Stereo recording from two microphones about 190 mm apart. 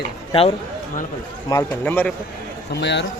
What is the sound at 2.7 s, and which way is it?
Speech, 65° left (ahead or behind).